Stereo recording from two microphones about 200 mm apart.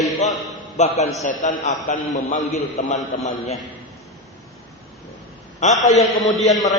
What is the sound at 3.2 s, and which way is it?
Speech, 35° left (ahead or behind).